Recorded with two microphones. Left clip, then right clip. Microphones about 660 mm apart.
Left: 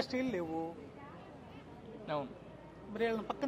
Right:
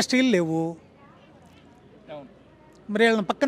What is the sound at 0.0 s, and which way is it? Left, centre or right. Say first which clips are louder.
Speech: right 15 dB; right.